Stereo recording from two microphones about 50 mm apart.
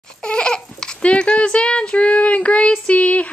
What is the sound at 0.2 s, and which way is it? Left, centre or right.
Babbling, centre.